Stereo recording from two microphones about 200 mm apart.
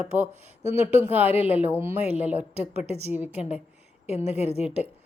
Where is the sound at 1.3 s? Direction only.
30° left (ahead or behind).